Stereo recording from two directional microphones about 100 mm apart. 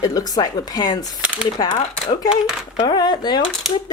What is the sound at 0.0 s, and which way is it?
Speech, 40° left (ahead or behind).